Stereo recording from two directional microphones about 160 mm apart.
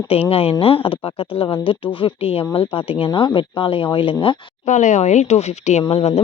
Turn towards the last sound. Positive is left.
turn(degrees=40)  # may be behind; listen again after turning